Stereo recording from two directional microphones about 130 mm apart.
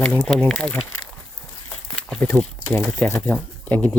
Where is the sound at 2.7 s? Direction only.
5° left (ahead or behind).